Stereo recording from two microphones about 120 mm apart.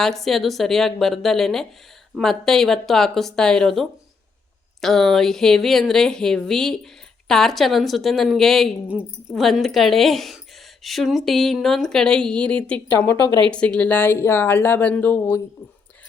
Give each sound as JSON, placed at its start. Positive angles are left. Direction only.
{"t": 0.0, "sound": "speech", "side_deg": 0}